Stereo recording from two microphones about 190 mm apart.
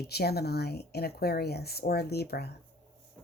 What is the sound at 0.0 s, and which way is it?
Speech, 55° left (ahead or behind).